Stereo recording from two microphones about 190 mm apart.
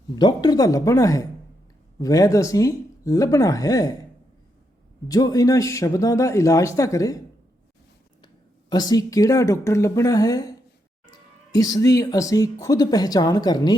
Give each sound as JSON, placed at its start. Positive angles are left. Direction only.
{"t": 0.2, "sound": "speech", "side_deg": 20}
{"t": 5.0, "sound": "speech", "side_deg": 20}
{"t": 8.7, "sound": "speech", "side_deg": 20}